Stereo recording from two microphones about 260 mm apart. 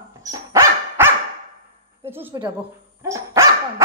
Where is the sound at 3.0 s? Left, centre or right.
Centre.